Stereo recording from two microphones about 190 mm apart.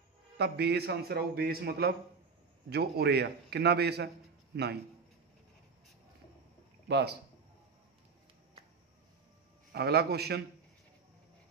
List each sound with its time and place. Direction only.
0.4 s a man's voice: 60° right (ahead or behind)
6.9 s a man's voice: 60° right (ahead or behind)
9.7 s a man's voice: 60° right (ahead or behind)